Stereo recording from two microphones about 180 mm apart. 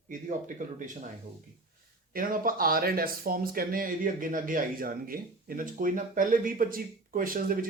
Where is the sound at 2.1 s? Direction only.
50° right (ahead or behind).